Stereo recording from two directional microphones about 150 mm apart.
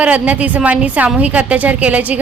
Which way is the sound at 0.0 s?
10° right (ahead or behind).